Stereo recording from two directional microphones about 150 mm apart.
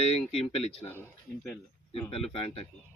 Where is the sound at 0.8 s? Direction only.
15° left (ahead or behind).